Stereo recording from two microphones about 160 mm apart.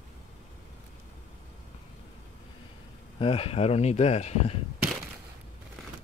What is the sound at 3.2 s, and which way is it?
Speech, 35° left (ahead or behind).